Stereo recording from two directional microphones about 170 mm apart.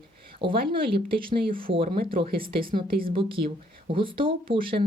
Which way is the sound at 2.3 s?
60° right (ahead or behind).